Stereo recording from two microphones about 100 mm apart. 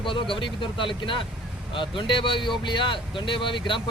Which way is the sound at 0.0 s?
55° left (ahead or behind).